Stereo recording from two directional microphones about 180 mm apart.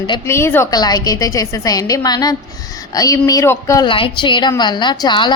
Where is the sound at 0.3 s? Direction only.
15° left (ahead or behind).